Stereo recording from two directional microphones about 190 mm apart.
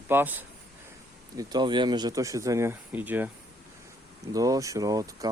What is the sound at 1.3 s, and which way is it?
Speech, 20° right (ahead or behind).